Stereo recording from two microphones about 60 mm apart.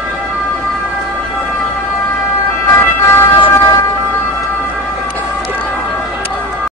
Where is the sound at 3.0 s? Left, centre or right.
Left.